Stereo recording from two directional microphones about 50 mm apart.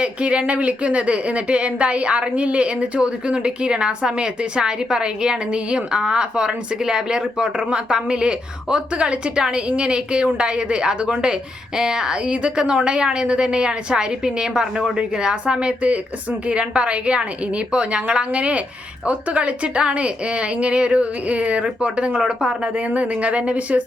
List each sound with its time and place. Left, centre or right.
0.0 s a woman's voice: right
22.9 s speech: right